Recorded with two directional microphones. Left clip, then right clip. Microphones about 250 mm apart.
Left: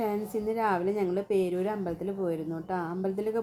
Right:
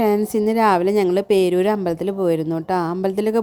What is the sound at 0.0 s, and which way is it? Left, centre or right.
A woman's voice, right.